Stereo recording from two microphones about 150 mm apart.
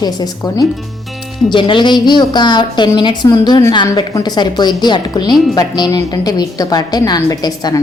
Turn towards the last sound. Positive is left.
turn(degrees=25)  # may be behind; listen again after turning